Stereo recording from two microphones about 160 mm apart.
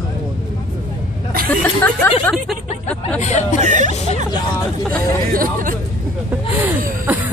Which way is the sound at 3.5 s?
50° right (ahead or behind).